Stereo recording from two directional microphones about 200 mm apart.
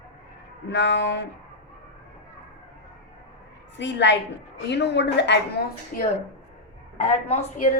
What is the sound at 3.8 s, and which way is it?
A woman's voice, 60° left (ahead or behind).